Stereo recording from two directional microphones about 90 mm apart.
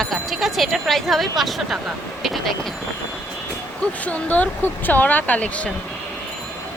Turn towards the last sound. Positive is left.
turn(degrees=15)  # may be behind; listen again after turning